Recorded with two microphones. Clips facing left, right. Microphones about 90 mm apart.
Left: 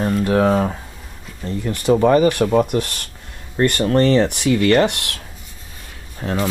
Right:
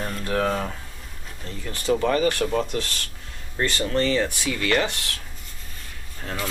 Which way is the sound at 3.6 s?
30° left (ahead or behind).